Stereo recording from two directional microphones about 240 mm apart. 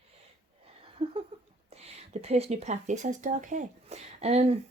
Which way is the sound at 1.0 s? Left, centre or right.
Right.